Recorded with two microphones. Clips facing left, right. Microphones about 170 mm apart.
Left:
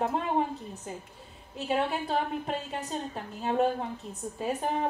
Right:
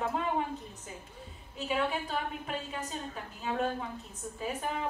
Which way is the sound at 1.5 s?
40° left (ahead or behind).